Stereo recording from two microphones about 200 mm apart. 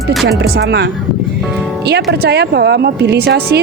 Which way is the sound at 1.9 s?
55° right (ahead or behind).